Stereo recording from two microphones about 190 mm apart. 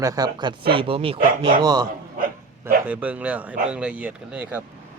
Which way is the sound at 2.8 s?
10° right (ahead or behind).